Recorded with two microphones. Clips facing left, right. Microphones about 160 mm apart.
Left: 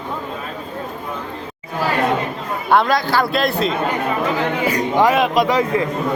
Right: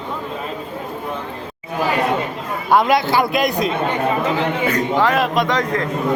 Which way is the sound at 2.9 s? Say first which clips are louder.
Right 1 dB; 20° right (ahead or behind).